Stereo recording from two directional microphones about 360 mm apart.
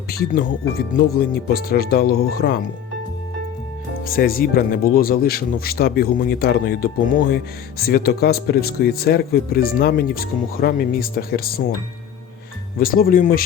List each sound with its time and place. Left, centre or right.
0.1 s speech: left
4.0 s speech: left
12.8 s speech: left